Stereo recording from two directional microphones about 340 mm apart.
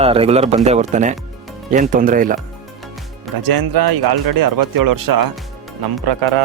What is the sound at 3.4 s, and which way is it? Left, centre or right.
Speech, right.